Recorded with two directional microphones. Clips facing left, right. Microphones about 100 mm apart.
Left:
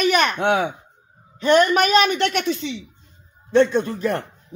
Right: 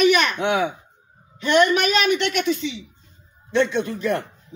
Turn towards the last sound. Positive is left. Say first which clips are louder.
# left 1 dB
turn(degrees=40)  # may be behind; listen again after turning